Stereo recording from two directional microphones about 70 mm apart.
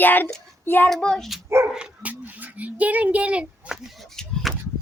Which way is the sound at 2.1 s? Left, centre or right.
Right.